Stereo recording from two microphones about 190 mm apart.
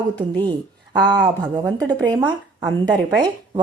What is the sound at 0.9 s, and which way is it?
Speech, 20° right (ahead or behind).